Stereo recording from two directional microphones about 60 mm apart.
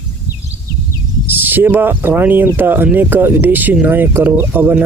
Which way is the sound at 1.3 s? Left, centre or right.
Right.